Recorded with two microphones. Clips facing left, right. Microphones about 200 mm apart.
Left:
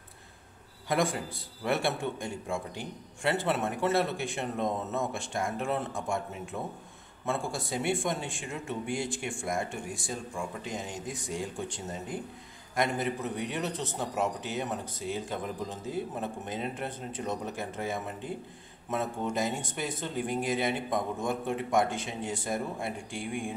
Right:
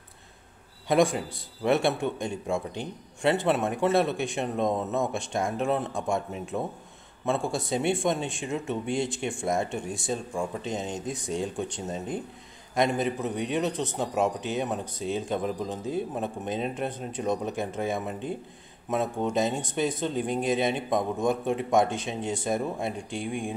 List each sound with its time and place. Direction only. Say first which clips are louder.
0.8 s a man's voice: right 6 dB; 20° right (ahead or behind)